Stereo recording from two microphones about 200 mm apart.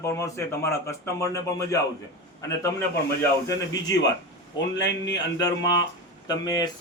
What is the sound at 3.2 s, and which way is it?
Speech, 15° left (ahead or behind).